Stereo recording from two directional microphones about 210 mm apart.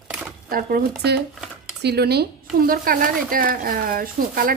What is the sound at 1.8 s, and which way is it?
A woman's voice, 50° right (ahead or behind).